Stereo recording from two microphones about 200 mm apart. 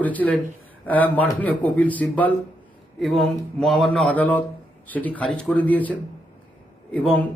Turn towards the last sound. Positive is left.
turn(degrees=5)  # may be behind; listen again after turning